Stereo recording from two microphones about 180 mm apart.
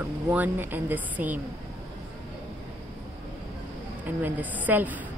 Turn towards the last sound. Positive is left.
turn(degrees=-10)  # may be behind; listen again after turning